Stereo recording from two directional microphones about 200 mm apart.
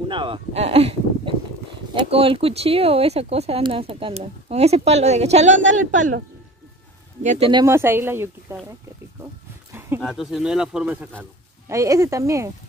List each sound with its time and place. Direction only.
0.1 s speech: 25° right (ahead or behind)
7.2 s speech: 25° right (ahead or behind)
7.6 s speech: 10° right (ahead or behind)
9.2 s a sound: 10° right (ahead or behind)
10.0 s speech: centre (ahead or behind)
11.7 s speech: 15° right (ahead or behind)